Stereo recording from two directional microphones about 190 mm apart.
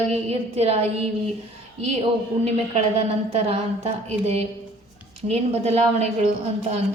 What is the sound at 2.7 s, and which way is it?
A woman's voice, 30° right (ahead or behind).